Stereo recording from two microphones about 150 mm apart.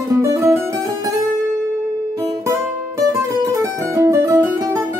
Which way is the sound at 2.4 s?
20° right (ahead or behind).